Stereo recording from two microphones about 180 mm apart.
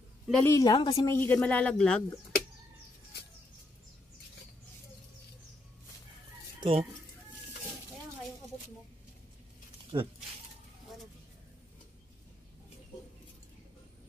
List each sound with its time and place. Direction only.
0.4 s a woman's voice: 15° left (ahead or behind)
1.0 s speech: 10° left (ahead or behind)
6.6 s speech: 30° right (ahead or behind)
9.9 s speech: 25° right (ahead or behind)